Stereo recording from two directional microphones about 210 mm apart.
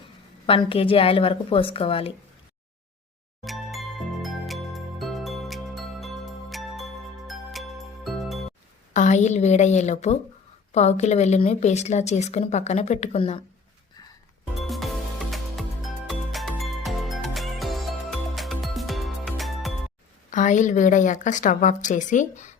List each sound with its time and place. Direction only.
0.4 s a woman's voice: 25° left (ahead or behind)
3.4 s jingle: centre (ahead or behind)
7.3 s music: centre (ahead or behind)
8.9 s a woman's voice: 35° left (ahead or behind)
15.3 s music: centre (ahead or behind)
20.3 s a woman's voice: 35° left (ahead or behind)